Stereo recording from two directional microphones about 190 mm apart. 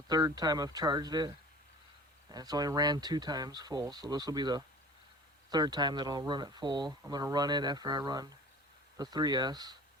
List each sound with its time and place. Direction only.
0.1 s speech: 20° right (ahead or behind)